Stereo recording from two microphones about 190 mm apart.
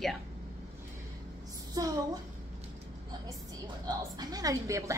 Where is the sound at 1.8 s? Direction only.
20° right (ahead or behind).